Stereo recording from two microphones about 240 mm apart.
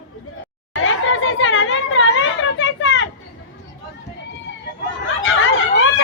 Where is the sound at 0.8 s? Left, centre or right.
Left.